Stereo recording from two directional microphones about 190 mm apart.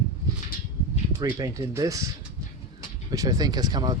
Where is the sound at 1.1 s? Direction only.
15° right (ahead or behind).